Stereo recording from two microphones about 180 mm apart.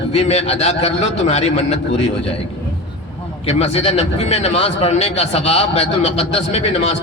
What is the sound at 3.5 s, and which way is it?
Speech, 35° left (ahead or behind).